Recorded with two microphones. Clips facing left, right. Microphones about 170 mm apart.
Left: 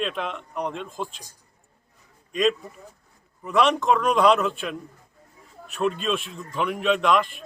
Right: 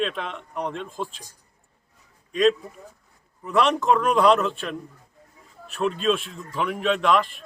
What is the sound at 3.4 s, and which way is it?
A man's voice, centre (ahead or behind).